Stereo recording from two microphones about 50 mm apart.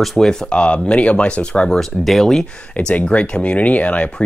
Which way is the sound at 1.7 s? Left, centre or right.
Centre.